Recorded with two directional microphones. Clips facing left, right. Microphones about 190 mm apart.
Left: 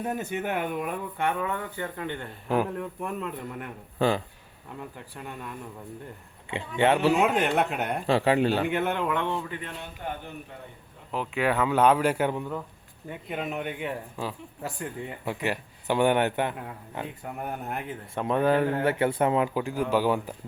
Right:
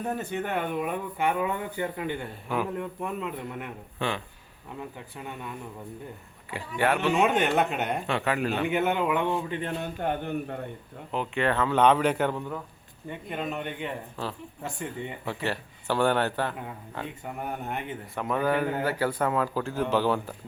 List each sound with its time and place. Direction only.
0.0 s speech: 10° left (ahead or behind); by 2.2 s 15° right (ahead or behind)
2.7 s speech: centre (ahead or behind)
3.9 s speech: 35° left (ahead or behind)
4.9 s speech: centre (ahead or behind)
6.7 s speech: 25° left (ahead or behind)
7.1 s speech: centre (ahead or behind)
8.0 s a man's voice: 30° left (ahead or behind)
8.6 s speech: centre (ahead or behind)
9.5 s speech: 30° right (ahead or behind)
9.8 s speech: 55° right (ahead or behind)
11.1 s speech: 5° left (ahead or behind)
15.3 s speech: 15° left (ahead or behind)
17.2 s speech: centre (ahead or behind)
18.1 s speech: 25° left (ahead or behind)